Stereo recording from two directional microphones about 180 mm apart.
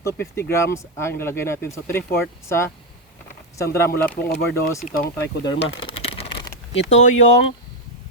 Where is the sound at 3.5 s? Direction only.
15° left (ahead or behind).